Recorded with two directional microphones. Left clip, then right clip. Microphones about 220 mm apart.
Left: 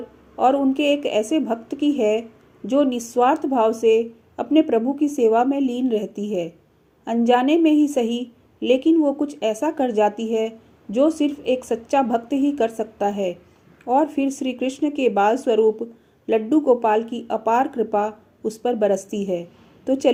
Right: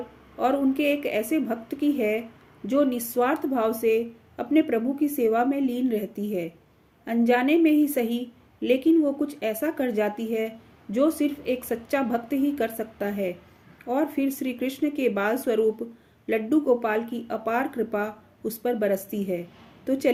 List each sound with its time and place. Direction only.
0.3 s speech: centre (ahead or behind)
6.2 s speech: 25° right (ahead or behind)
7.0 s a woman's voice: 5° left (ahead or behind)